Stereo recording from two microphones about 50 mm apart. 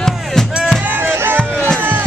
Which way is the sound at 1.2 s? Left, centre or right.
Right.